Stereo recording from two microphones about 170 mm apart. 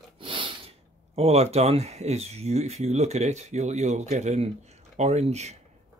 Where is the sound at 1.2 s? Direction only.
35° right (ahead or behind).